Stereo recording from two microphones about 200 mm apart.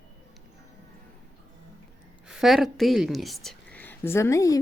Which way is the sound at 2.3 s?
Centre (ahead or behind).